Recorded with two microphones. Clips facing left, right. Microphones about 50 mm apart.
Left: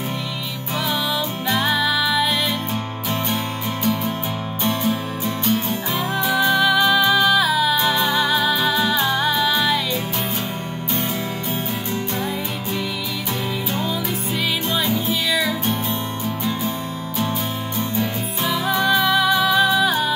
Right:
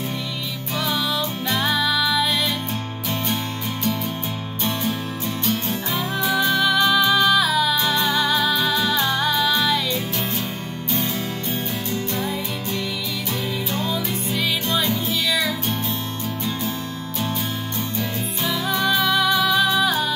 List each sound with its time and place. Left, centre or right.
1.5 s music: centre
4.6 s music: centre
13.7 s music: centre
17.9 s music: centre